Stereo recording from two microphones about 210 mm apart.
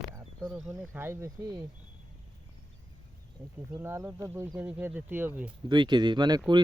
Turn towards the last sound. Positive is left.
turn(degrees=-20)  # may be behind; listen again after turning